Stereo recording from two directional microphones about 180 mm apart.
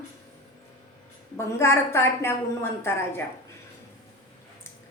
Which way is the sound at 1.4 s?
15° left (ahead or behind).